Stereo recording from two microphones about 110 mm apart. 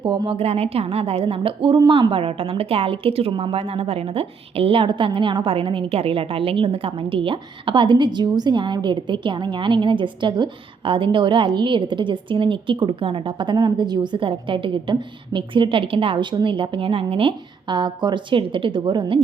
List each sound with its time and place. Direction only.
0.0 s a woman's voice: 50° right (ahead or behind)
3.3 s a woman's voice: 50° right (ahead or behind)
3.6 s a woman's voice: 65° right (ahead or behind)